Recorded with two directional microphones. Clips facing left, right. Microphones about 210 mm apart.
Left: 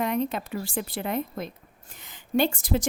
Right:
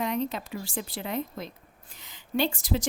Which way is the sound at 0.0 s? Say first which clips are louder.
Left 3 dB; 55° left (ahead or behind).